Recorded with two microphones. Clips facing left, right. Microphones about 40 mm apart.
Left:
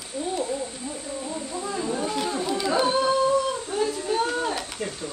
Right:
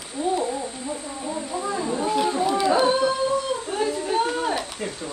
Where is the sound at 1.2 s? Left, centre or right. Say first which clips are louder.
Right 6 dB; centre.